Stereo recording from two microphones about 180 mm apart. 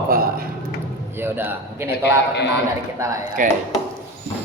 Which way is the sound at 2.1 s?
70° left (ahead or behind).